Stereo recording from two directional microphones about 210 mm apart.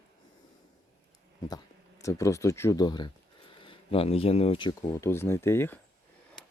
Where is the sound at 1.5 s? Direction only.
15° left (ahead or behind).